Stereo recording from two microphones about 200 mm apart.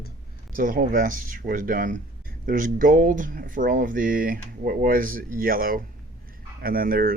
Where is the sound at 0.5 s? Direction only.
45° right (ahead or behind).